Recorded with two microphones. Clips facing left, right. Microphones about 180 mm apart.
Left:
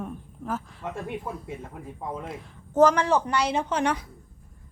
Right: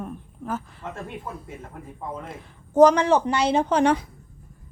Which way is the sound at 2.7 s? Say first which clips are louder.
Right 4 dB; 20° right (ahead or behind).